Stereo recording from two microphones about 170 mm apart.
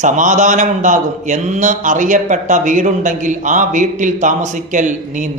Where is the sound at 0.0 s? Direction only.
50° right (ahead or behind).